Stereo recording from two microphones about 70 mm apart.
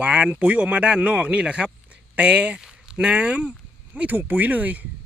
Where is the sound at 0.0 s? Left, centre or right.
Centre.